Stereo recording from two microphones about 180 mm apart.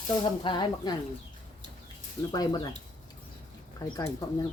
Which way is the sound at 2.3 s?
25° left (ahead or behind).